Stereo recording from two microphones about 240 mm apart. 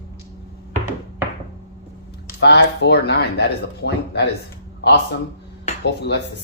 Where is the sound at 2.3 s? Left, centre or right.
Left.